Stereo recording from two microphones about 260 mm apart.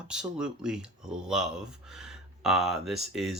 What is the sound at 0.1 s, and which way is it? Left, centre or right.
Speech, centre.